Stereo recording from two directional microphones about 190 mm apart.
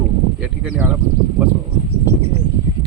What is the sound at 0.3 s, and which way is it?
Speech, 5° right (ahead or behind).